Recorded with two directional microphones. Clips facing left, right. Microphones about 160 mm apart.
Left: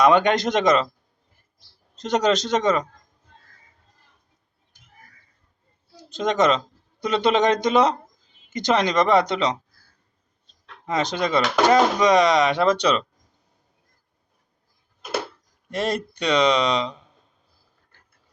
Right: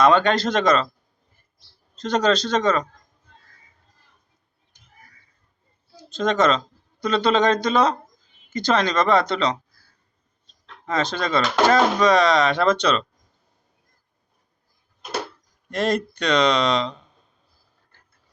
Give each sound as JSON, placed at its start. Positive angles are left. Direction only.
{"t": 0.0, "sound": "speech", "side_deg": 15}
{"t": 2.0, "sound": "speech", "side_deg": 15}
{"t": 6.1, "sound": "speech", "side_deg": 15}
{"t": 10.8, "sound": "speech", "side_deg": 15}
{"t": 15.7, "sound": "speech", "side_deg": 10}